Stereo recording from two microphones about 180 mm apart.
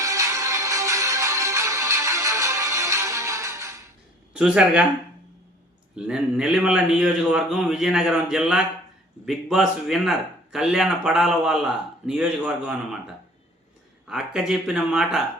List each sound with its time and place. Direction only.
0.0 s music: 15° right (ahead or behind)
4.4 s a man's voice: 5° right (ahead or behind)
6.0 s a man's voice: 5° right (ahead or behind)
14.1 s a man's voice: 5° right (ahead or behind)